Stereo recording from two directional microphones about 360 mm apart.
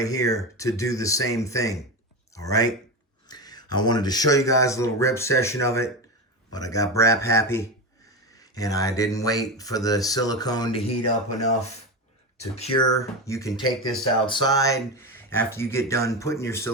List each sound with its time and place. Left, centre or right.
0.0 s speech: centre